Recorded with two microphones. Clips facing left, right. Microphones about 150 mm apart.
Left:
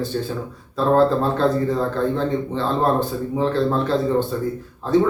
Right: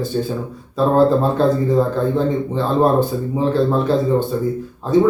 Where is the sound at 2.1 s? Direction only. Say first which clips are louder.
Right 4 dB; 10° right (ahead or behind).